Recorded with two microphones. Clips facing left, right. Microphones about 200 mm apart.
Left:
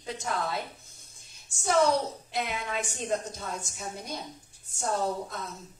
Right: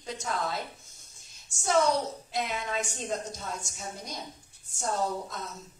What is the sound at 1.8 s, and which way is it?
A woman's voice, 60° left (ahead or behind).